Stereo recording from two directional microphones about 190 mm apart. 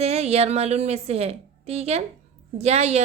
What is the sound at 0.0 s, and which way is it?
A woman's voice, 35° right (ahead or behind).